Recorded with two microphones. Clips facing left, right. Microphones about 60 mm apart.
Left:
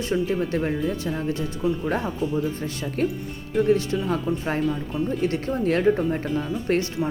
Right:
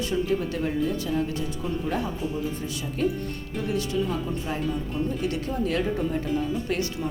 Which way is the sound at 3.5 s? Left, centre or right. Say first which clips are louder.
Left 7 dB; left.